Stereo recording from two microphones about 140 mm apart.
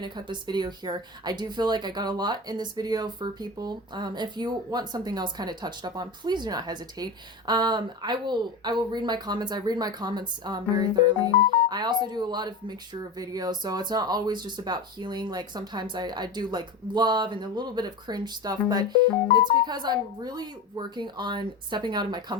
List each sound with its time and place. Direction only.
0.0 s speech: 30° right (ahead or behind)